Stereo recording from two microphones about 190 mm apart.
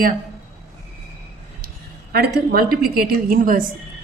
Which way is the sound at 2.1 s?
55° right (ahead or behind).